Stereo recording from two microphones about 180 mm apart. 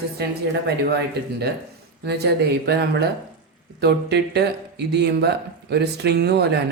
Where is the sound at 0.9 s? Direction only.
65° right (ahead or behind).